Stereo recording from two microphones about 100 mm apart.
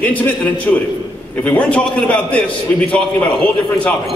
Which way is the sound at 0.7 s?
15° left (ahead or behind).